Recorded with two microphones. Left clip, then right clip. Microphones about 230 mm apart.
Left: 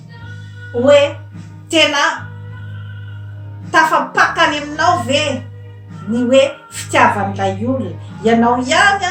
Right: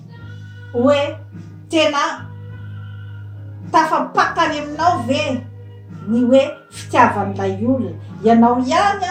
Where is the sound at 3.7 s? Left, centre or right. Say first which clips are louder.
Left 3 dB; centre.